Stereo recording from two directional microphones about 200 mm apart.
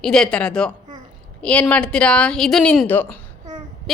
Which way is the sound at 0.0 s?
5° left (ahead or behind).